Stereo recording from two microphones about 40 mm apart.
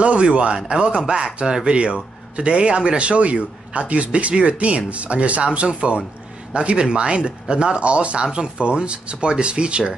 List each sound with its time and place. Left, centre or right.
0.0 s a man's voice: right